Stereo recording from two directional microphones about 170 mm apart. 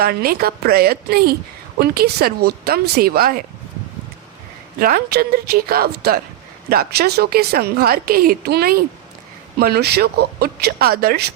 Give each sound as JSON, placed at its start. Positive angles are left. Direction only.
{"t": 0.0, "sound": "a woman's voice", "side_deg": -65}
{"t": 4.8, "sound": "a woman's voice", "side_deg": -60}